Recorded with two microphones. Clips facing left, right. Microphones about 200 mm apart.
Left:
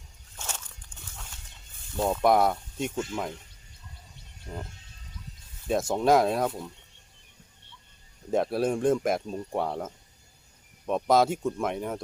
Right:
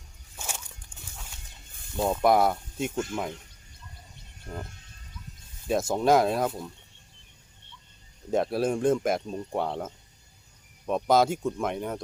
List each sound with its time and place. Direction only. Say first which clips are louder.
0.3 s a sound: right 1 dB; 10° right (ahead or behind)
0.9 s horse: even; 35° right (ahead or behind)
2.2 s speech: even; centre (ahead or behind)
5.6 s speech: even; centre (ahead or behind)
8.3 s speech: even; centre (ahead or behind)